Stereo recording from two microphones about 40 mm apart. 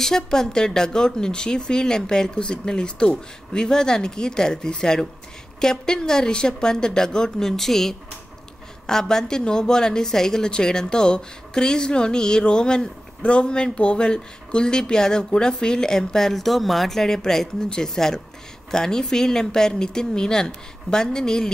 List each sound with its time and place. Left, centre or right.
0.0 s a woman's voice: centre